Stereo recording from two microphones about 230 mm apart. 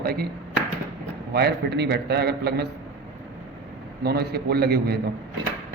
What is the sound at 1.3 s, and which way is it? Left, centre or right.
A man's voice, right.